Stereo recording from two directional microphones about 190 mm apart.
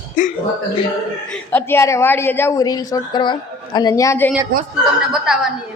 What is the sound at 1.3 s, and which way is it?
Speech, 10° left (ahead or behind).